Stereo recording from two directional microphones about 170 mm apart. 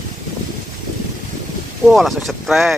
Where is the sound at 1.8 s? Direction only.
Centre (ahead or behind).